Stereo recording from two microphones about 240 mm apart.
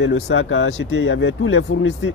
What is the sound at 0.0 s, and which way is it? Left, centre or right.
Speech, left.